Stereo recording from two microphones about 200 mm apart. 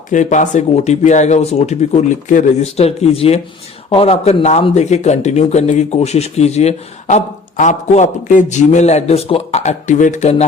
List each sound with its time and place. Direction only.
0.1 s speech: 35° left (ahead or behind)